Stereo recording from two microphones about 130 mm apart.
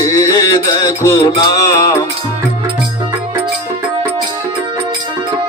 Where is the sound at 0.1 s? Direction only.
25° left (ahead or behind).